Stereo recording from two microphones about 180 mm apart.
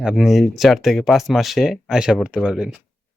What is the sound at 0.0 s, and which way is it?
Speech, 5° right (ahead or behind).